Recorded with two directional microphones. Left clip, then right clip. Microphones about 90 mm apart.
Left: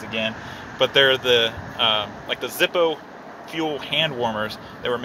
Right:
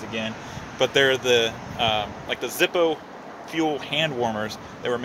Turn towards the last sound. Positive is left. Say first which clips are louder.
# left 1 dB
turn(degrees=-40)  # may be behind; listen again after turning